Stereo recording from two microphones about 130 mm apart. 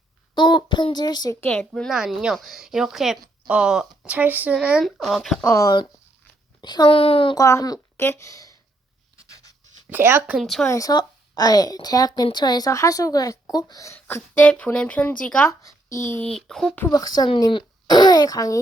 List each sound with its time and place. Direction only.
0.3 s a child's voice: 35° left (ahead or behind)
1.4 s speech: 10° left (ahead or behind)
5.5 s a child's voice: 25° left (ahead or behind); by 7.3 s 45° left (ahead or behind)
7.3 s a child's voice: 25° left (ahead or behind)
9.3 s writing: 25° left (ahead or behind)
9.9 s speech: 15° right (ahead or behind)
10.4 s speech: centre (ahead or behind)
10.7 s a child's voice: 25° left (ahead or behind); by 15.4 s 10° left (ahead or behind)
15.4 s speech: 25° left (ahead or behind)
16.2 s speech: 5° left (ahead or behind)
16.9 s a child's voice: 30° left (ahead or behind)